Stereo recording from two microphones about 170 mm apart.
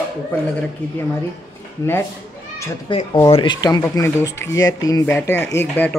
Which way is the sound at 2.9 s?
30° left (ahead or behind).